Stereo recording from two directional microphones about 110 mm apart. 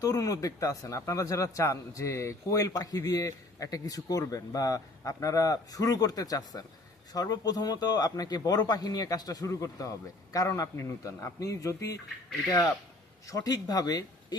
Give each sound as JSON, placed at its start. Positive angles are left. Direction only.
{"t": 0.0, "sound": "a man's voice", "side_deg": 30}
{"t": 13.2, "sound": "a man's voice", "side_deg": 30}